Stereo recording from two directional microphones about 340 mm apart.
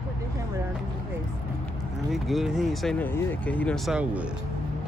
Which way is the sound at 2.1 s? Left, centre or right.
Centre.